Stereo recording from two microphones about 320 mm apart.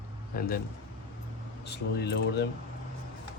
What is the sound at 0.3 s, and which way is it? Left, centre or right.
Speech, left.